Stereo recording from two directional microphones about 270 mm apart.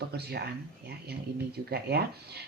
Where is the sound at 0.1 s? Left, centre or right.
Right.